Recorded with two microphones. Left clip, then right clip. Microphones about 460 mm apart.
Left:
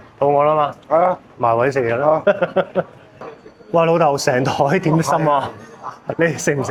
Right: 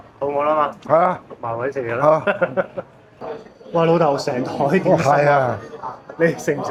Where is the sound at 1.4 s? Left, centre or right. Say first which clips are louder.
Left 8 dB; left.